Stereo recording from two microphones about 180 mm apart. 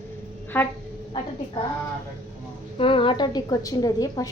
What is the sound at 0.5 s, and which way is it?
Speech, 10° left (ahead or behind).